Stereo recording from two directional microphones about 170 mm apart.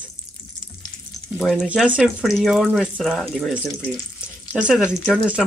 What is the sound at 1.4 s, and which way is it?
Speech, centre (ahead or behind).